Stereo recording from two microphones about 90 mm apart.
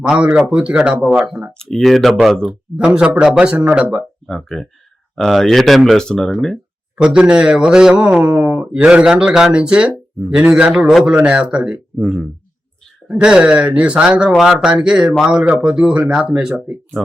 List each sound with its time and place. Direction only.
0.0 s speech: 15° right (ahead or behind)
1.5 s speech: centre (ahead or behind)
2.5 s speech: 10° right (ahead or behind)
4.3 s speech: centre (ahead or behind)
7.0 s speech: 10° right (ahead or behind)
8.2 s speech: 20° right (ahead or behind); by 12.2 s centre (ahead or behind)
13.1 s speech: 10° right (ahead or behind)